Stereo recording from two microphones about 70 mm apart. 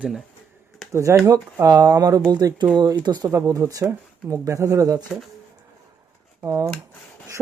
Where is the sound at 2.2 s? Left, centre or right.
Right.